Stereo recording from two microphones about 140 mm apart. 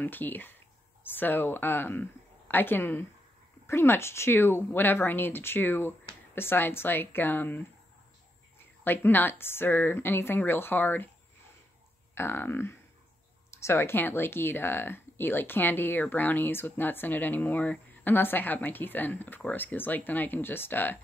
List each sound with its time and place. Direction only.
0.0 s speech: 15° left (ahead or behind)
12.2 s speech: 15° left (ahead or behind)